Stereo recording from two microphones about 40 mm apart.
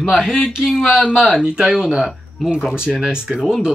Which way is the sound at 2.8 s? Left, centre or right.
Right.